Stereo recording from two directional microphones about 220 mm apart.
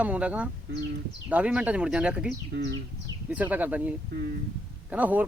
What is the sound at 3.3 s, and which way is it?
Speech, 5° right (ahead or behind).